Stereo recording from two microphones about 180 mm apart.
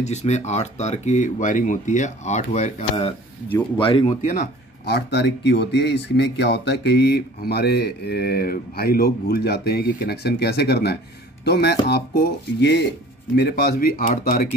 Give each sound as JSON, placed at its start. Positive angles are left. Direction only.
{"t": 0.0, "sound": "speech", "side_deg": 40}
{"t": 3.7, "sound": "speech", "side_deg": 30}
{"t": 4.2, "sound": "speech", "side_deg": 50}
{"t": 13.4, "sound": "speech", "side_deg": 60}